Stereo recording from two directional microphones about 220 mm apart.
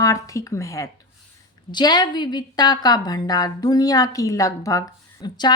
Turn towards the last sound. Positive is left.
turn(degrees=20)  # may be behind; listen again after turning